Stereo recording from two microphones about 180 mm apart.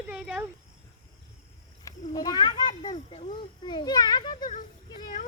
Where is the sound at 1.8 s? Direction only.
20° left (ahead or behind).